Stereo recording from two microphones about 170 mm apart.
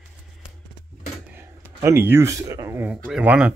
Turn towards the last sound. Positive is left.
turn(degrees=-5)  # may be behind; listen again after turning